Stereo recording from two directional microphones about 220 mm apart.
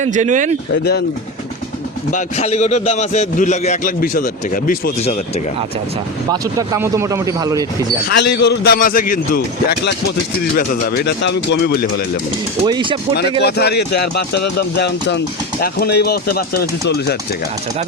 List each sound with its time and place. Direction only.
0.0 s speech: 35° right (ahead or behind)
2.0 s a man's voice: 30° left (ahead or behind)
6.3 s speech: 15° right (ahead or behind)
8.1 s a man's voice: 50° left (ahead or behind)
12.6 s speech: 20° right (ahead or behind)
13.4 s a man's voice: 45° left (ahead or behind)